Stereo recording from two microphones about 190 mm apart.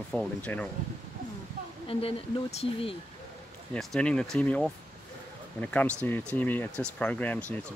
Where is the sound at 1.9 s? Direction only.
30° left (ahead or behind).